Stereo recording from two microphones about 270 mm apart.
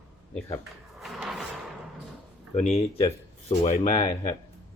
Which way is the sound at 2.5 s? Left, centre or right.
Left.